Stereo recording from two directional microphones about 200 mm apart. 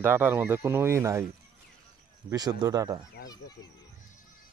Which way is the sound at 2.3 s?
20° right (ahead or behind).